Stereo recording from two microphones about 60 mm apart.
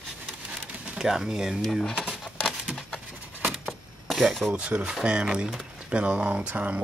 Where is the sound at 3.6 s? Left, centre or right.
Centre.